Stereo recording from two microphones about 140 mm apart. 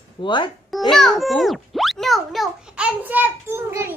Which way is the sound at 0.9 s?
Centre (ahead or behind).